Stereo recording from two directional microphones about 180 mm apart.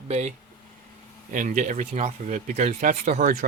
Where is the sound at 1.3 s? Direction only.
45° right (ahead or behind).